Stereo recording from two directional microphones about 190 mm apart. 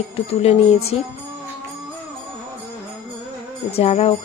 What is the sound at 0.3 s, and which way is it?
Music, 30° left (ahead or behind).